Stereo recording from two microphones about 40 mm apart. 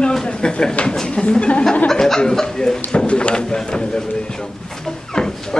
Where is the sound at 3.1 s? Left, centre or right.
Left.